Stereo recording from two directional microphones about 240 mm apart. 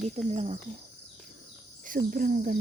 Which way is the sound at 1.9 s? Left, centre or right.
Right.